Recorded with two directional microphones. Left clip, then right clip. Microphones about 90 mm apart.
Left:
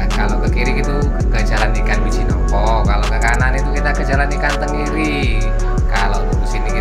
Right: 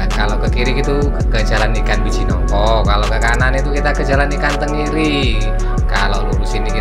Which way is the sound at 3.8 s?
25° right (ahead or behind).